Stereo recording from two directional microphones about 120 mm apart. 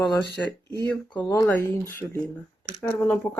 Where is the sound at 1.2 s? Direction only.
30° left (ahead or behind).